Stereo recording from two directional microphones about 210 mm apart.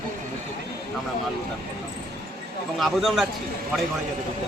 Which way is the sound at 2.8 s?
Centre (ahead or behind).